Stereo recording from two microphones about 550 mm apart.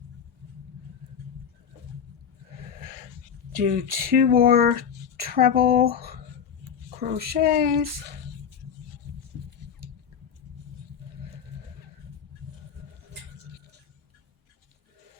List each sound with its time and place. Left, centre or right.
3.6 s speech: centre
7.0 s speech: centre